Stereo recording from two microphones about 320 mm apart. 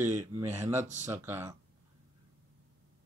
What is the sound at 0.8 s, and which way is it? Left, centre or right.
Speech, right.